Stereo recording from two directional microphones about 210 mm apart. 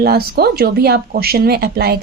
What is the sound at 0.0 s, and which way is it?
Speech, 50° right (ahead or behind).